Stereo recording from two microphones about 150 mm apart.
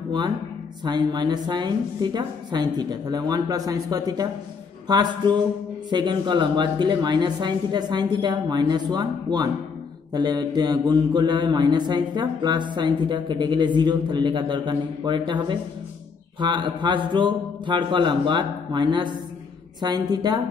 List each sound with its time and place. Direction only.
0.8 s a woman's voice: 30° right (ahead or behind)
10.1 s mantra: 30° right (ahead or behind)
19.8 s a woman's voice: 30° right (ahead or behind)